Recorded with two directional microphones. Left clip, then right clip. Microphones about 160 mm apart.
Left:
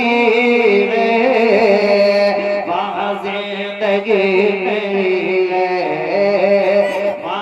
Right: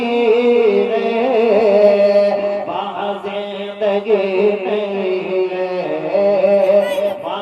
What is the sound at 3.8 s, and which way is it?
Music, 75° left (ahead or behind).